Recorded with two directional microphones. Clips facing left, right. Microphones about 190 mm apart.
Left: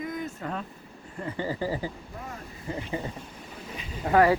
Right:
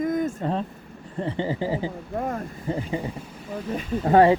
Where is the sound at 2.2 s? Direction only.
50° right (ahead or behind).